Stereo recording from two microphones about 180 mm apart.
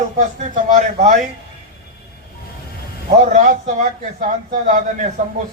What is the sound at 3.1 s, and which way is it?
Speech, 45° right (ahead or behind).